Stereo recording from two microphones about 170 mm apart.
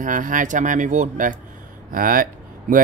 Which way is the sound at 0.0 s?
50° right (ahead or behind).